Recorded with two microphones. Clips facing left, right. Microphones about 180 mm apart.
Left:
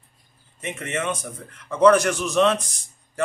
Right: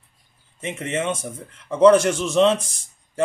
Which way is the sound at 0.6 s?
25° right (ahead or behind).